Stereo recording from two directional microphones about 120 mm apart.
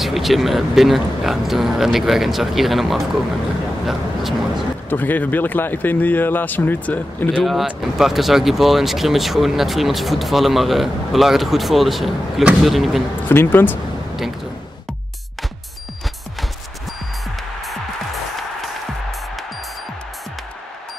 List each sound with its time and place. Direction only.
0.0 s speech: centre (ahead or behind)
4.8 s speech: 15° left (ahead or behind)
7.4 s speech: centre (ahead or behind)
13.3 s speech: 20° left (ahead or behind)